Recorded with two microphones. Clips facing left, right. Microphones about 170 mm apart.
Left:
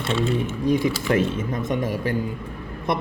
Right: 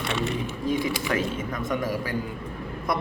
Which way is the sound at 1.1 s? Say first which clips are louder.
Left 5 dB; 25° left (ahead or behind).